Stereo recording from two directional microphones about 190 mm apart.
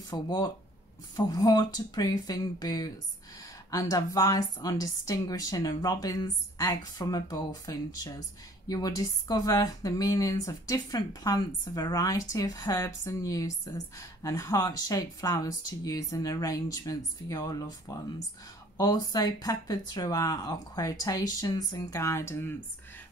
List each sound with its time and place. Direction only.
0.1 s a woman's voice: 20° left (ahead or behind)